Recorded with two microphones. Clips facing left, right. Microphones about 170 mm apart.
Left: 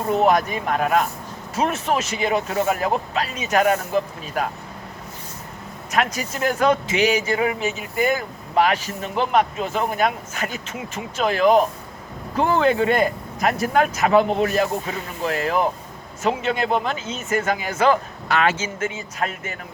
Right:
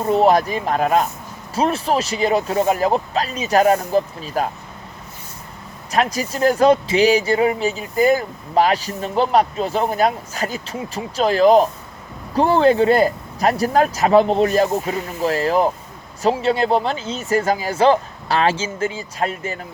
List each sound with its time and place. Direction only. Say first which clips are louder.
0.1 s speech: right 3 dB; 30° right (ahead or behind)
5.9 s speech: right 3 dB; 35° right (ahead or behind)